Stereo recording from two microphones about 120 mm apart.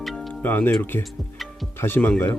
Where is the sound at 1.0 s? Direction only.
Centre (ahead or behind).